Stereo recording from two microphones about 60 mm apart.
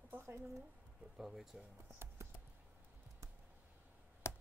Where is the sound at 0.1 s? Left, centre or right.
Right.